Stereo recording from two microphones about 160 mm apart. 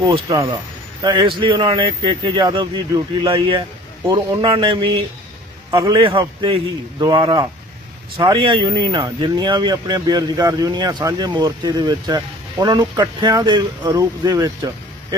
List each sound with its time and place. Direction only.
0.0 s speech: 25° right (ahead or behind)